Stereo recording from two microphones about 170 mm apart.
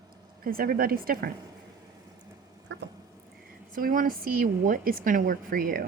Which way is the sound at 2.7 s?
90° right.